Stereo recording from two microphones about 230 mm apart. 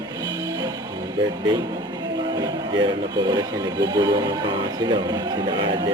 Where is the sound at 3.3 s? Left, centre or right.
Centre.